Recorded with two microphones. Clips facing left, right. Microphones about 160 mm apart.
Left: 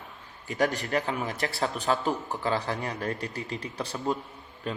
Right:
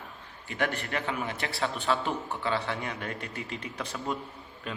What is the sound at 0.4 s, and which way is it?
A man's voice, 40° left (ahead or behind).